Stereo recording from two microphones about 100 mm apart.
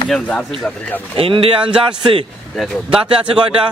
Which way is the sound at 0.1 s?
10° left (ahead or behind).